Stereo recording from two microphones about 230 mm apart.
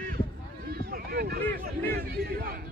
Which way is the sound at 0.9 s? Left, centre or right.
Right.